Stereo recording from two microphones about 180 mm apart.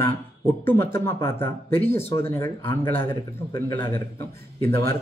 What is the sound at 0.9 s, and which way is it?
Speech, 15° left (ahead or behind).